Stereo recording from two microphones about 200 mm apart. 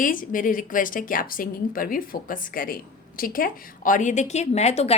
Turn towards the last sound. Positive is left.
turn(degrees=30)  # may be behind; listen again after turning